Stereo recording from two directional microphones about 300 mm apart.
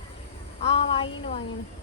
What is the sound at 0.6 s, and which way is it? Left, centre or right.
Speech, centre.